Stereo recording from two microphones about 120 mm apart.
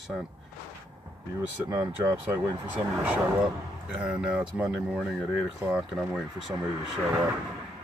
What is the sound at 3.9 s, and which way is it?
Speech, 10° right (ahead or behind).